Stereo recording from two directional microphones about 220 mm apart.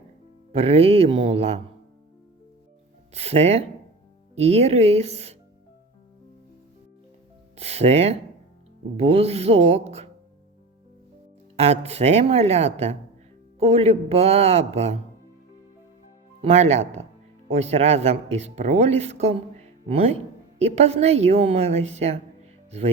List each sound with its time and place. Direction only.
0.5 s speech: 25° right (ahead or behind)
3.1 s speech: 30° right (ahead or behind)
7.6 s speech: 30° right (ahead or behind)
11.5 s speech: 30° right (ahead or behind)
16.4 s speech: 30° right (ahead or behind)
20.9 s speech: 30° right (ahead or behind)